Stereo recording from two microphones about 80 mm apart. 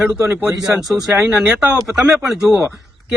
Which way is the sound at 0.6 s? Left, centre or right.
Centre.